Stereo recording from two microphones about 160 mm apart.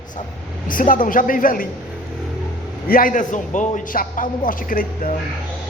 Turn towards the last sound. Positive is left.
turn(degrees=60)  # may be behind; listen again after turning